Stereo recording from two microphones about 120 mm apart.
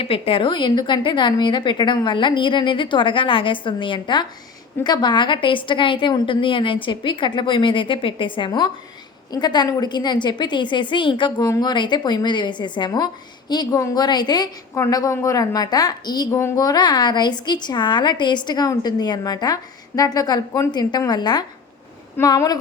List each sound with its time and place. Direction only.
0.0 s a woman's voice: 50° left (ahead or behind); by 22.5 s 30° left (ahead or behind)